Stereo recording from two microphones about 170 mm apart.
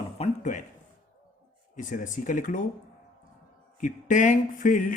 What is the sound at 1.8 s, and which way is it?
Speech, 50° left (ahead or behind).